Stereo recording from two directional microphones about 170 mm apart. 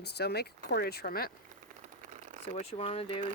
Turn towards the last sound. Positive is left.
turn(degrees=35)  # may be behind; listen again after turning